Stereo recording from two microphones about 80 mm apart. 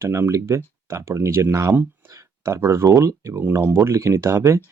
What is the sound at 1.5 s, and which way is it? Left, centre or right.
Speech, right.